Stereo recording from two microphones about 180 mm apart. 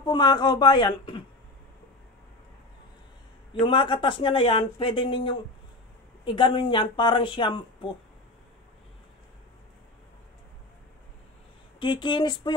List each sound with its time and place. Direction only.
0.0 s speech: 25° left (ahead or behind)
3.5 s speech: 25° left (ahead or behind)
11.8 s speech: 25° left (ahead or behind)